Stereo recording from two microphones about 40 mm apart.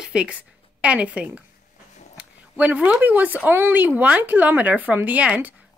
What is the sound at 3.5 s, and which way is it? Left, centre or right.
Speech, right.